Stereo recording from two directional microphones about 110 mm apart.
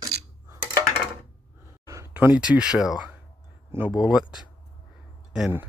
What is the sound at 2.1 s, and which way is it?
Speech, 15° right (ahead or behind).